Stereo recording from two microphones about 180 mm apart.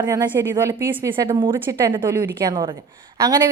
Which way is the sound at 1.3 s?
30° right (ahead or behind).